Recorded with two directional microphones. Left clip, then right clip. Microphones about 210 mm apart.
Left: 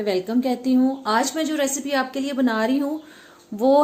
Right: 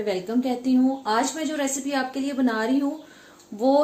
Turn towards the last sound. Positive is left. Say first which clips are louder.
# left 3 dB
turn(degrees=30)  # may be behind; listen again after turning